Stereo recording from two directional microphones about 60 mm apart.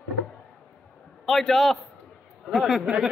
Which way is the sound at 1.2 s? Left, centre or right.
Centre.